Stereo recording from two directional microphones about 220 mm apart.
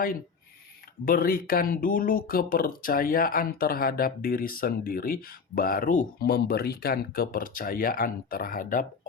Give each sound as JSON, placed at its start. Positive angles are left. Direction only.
{"t": 1.0, "sound": "speech", "side_deg": 40}